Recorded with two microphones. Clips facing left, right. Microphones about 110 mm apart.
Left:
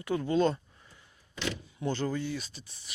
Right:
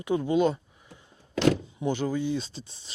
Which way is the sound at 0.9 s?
25° right (ahead or behind).